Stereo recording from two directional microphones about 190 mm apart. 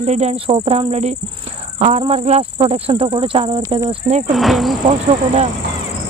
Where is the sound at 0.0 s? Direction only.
35° right (ahead or behind).